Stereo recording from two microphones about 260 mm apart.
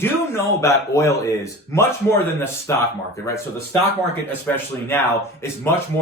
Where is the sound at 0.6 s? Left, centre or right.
Centre.